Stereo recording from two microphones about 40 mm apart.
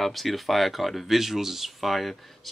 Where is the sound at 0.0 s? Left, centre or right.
Centre.